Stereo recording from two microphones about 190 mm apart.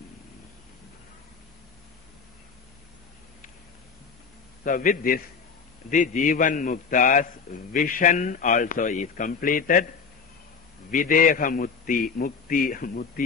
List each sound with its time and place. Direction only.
4.6 s a man's voice: 45° left (ahead or behind)
10.9 s a man's voice: 45° left (ahead or behind)